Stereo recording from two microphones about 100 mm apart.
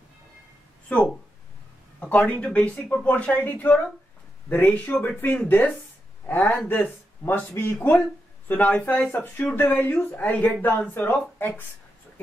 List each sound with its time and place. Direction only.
0.8 s a man's voice: 10° left (ahead or behind)